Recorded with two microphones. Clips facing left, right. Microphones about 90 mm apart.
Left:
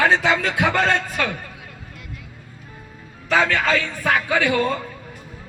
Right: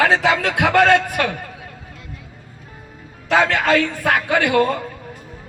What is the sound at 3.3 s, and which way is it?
A man's voice, 65° right (ahead or behind).